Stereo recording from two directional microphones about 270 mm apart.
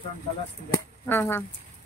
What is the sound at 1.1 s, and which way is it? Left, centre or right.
Speech, centre.